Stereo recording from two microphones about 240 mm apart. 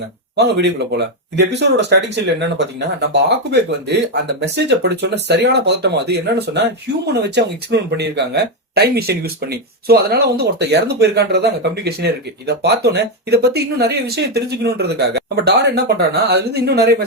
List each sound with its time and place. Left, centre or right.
0.3 s speech: right